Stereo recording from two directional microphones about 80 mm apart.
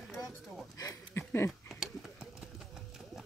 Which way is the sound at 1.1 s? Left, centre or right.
Left.